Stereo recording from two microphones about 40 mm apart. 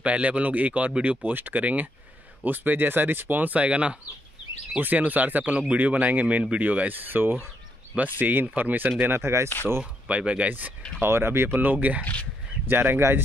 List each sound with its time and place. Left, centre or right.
0.0 s speech: right
1.3 s speech: right
2.4 s speech: right
3.6 s speech: right
4.7 s speech: right
7.9 s speech: right
9.0 s speech: right
10.0 s speech: right
11.0 s speech: right
11.5 s speech: right
12.0 s speech: left
12.6 s speech: right